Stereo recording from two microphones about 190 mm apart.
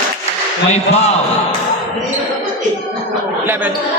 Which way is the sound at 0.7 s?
35° left (ahead or behind).